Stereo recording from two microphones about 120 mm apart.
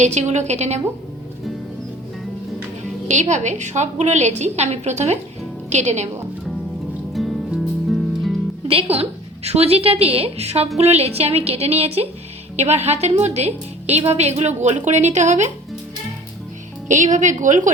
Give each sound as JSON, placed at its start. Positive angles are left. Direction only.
{"t": 0.0, "sound": "a woman's voice", "side_deg": -70}
{"t": 3.1, "sound": "a woman's voice", "side_deg": -80}
{"t": 7.1, "sound": "music", "side_deg": 0}
{"t": 8.6, "sound": "a woman's voice", "side_deg": -50}
{"t": 16.9, "sound": "a woman's voice", "side_deg": -90}